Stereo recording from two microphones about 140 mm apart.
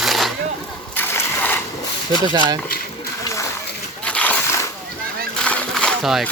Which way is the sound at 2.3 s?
30° right (ahead or behind).